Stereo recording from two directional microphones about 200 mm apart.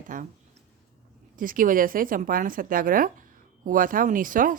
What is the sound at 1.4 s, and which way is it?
A woman's voice, 45° right (ahead or behind).